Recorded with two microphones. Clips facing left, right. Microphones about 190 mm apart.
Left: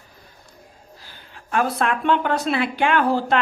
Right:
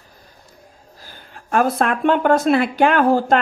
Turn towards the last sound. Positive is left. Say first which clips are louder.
# right 4 dB
turn(degrees=-45)  # may be behind; listen again after turning